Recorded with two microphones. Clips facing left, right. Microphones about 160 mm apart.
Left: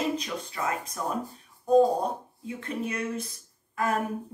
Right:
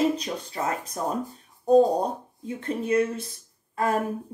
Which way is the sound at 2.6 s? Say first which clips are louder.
Right 9 dB; 30° right (ahead or behind).